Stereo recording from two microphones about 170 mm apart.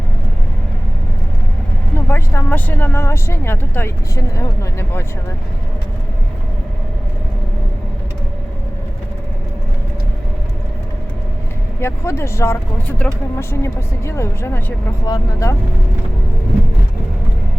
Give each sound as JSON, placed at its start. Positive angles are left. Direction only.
{"t": 2.0, "sound": "speech", "side_deg": 10}
{"t": 11.8, "sound": "speech", "side_deg": 15}